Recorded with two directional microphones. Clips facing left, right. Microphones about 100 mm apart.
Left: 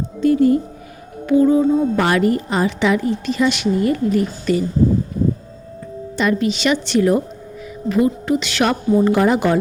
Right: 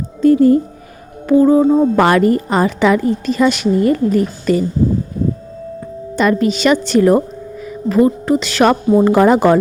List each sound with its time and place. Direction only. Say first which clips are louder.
0.2 s a woman's voice: right 5 dB; 40° right (ahead or behind)
6.1 s a woman's voice: right 4 dB; 45° right (ahead or behind)
9.0 s a woman's voice: right 4 dB; 55° right (ahead or behind)